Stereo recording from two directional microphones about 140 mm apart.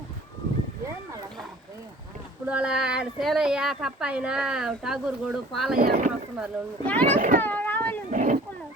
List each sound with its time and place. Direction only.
2.5 s speech: 5° right (ahead or behind)
5.7 s speech: 90° right
6.8 s a child's voice: 10° left (ahead or behind)
7.2 s speech: 70° right (ahead or behind)
7.4 s a sound: 15° left (ahead or behind)
8.1 s speech: 60° right (ahead or behind)